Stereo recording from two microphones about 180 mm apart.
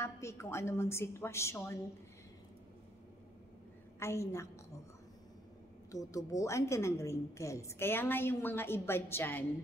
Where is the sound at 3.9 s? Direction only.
15° left (ahead or behind).